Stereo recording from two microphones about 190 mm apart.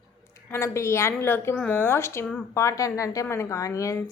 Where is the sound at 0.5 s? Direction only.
15° left (ahead or behind).